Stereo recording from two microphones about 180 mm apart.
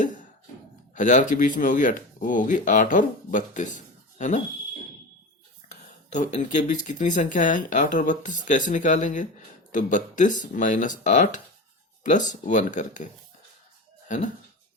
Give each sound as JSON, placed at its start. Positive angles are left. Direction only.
{"t": 0.9, "sound": "speech", "side_deg": 45}
{"t": 5.6, "sound": "a sound", "side_deg": 40}
{"t": 6.1, "sound": "speech", "side_deg": 40}